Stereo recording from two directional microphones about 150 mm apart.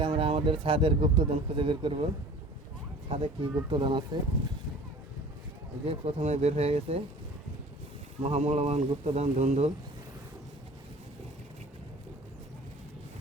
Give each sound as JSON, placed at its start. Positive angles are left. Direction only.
{"t": 0.0, "sound": "speech", "side_deg": -40}
{"t": 3.1, "sound": "speech", "side_deg": -40}
{"t": 5.8, "sound": "speech", "side_deg": -40}
{"t": 8.2, "sound": "speech", "side_deg": -45}